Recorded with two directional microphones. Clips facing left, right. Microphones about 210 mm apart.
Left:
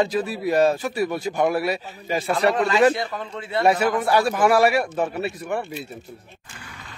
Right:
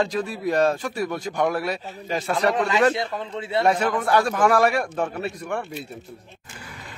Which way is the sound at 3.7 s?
10° left (ahead or behind).